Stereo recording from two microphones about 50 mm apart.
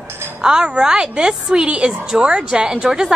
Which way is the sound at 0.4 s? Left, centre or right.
Centre.